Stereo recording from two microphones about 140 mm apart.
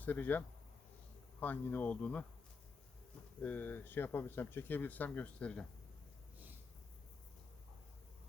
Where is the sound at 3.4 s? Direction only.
10° left (ahead or behind).